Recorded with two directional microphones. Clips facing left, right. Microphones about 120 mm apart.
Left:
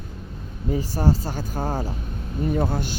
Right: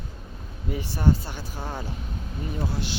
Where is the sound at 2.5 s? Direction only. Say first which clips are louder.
Left 7 dB; 55° left (ahead or behind).